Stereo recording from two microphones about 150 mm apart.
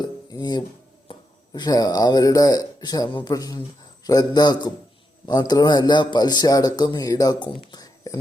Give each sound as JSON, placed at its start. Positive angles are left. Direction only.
{"t": 0.0, "sound": "dishes", "side_deg": 25}
{"t": 1.1, "sound": "a sound", "side_deg": 35}
{"t": 1.5, "sound": "speech", "side_deg": 25}